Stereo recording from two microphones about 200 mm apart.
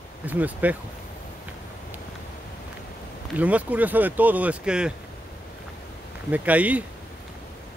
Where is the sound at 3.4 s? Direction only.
5° right (ahead or behind).